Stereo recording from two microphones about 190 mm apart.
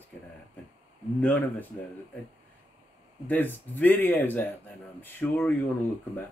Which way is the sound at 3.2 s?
10° left (ahead or behind).